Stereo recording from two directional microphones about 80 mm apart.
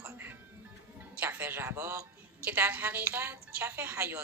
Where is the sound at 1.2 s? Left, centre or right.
Right.